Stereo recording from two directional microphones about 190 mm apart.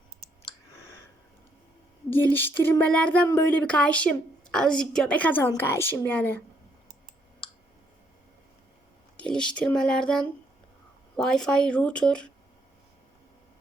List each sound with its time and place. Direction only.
2.0 s speech: 10° left (ahead or behind)
9.3 s speech: 5° left (ahead or behind)